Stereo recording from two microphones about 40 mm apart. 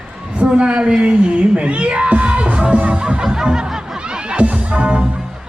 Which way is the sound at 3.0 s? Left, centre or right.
Right.